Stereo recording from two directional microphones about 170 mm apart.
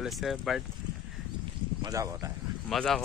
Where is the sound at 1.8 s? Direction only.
20° right (ahead or behind).